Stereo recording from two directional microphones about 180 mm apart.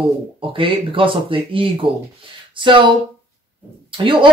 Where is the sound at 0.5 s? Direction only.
30° right (ahead or behind).